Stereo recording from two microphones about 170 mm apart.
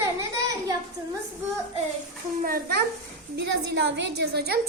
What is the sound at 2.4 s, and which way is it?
Speech, 60° right (ahead or behind).